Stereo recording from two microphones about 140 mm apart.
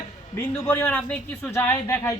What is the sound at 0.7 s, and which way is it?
Speech, 10° left (ahead or behind).